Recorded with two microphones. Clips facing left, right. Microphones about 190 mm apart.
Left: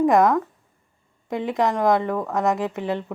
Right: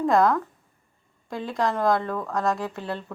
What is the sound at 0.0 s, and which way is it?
Speech, 15° left (ahead or behind).